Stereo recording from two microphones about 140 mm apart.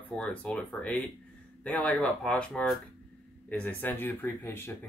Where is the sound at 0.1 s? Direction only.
10° left (ahead or behind).